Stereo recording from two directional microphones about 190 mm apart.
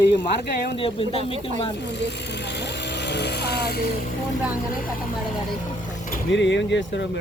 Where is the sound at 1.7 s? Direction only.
65° left (ahead or behind).